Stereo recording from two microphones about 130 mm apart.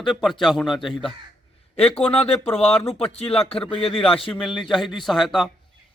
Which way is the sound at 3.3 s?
45° left (ahead or behind).